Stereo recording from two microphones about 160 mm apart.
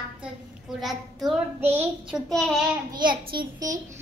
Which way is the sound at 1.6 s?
10° right (ahead or behind).